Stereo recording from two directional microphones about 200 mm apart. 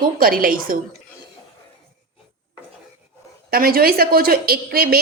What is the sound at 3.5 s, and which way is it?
A woman's voice, 50° right (ahead or behind).